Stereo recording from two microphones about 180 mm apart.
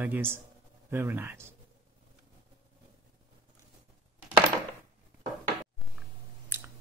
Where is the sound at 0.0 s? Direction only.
10° right (ahead or behind).